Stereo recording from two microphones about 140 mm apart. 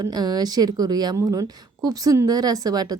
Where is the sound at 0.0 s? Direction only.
30° right (ahead or behind).